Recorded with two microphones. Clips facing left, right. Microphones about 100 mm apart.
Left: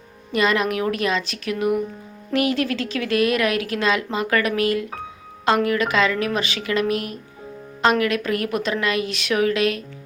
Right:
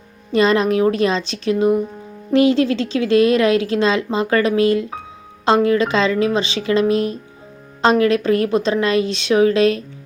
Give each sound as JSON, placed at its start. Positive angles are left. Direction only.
{"t": 0.3, "sound": "a woman's voice", "side_deg": -30}